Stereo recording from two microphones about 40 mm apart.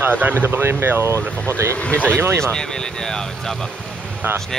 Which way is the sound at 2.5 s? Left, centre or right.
Centre.